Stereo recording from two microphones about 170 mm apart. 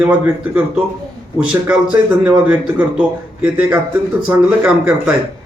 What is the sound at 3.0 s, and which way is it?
A man's voice, 10° right (ahead or behind).